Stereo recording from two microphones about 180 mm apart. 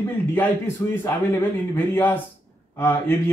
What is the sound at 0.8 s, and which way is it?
A man's voice, 15° left (ahead or behind).